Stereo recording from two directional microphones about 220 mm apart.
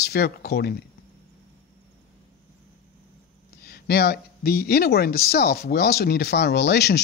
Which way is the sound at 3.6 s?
45° left (ahead or behind).